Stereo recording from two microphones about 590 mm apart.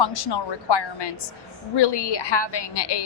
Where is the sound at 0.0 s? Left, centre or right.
Left.